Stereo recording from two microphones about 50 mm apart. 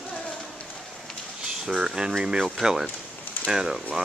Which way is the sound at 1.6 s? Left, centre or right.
Centre.